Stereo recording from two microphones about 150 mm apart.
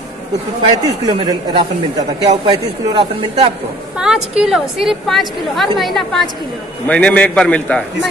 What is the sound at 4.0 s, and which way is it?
A woman's voice, 5° right (ahead or behind).